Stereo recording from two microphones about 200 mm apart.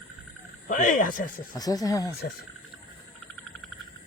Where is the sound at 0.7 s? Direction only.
45° left (ahead or behind).